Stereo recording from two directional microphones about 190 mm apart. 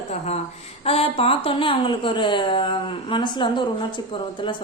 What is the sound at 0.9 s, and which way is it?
A woman's voice, 30° left (ahead or behind).